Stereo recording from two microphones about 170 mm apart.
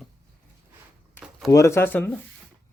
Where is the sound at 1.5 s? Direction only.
15° left (ahead or behind).